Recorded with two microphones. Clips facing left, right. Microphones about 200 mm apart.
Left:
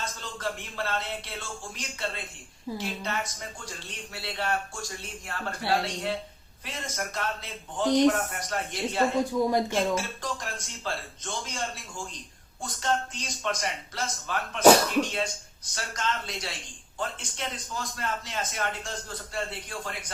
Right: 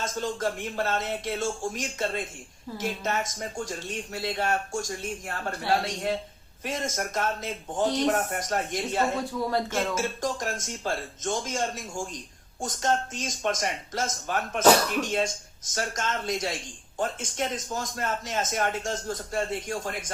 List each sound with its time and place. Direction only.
0.0 s speech: 45° right (ahead or behind)